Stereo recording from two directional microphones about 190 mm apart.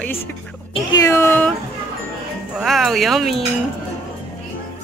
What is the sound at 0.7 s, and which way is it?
Speech, 20° left (ahead or behind).